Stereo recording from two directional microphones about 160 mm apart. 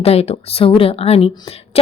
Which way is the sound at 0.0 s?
40° left (ahead or behind).